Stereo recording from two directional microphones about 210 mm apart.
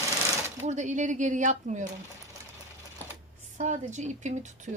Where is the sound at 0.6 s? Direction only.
35° right (ahead or behind).